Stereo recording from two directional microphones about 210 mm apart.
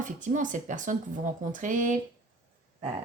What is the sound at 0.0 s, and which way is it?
Speech, 35° right (ahead or behind).